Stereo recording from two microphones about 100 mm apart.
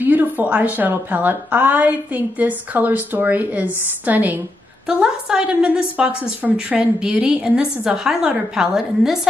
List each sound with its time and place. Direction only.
0.0 s a woman's voice: 20° right (ahead or behind)